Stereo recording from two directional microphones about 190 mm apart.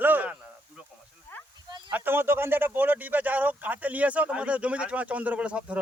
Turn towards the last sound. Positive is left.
turn(degrees=-5)  # may be behind; listen again after turning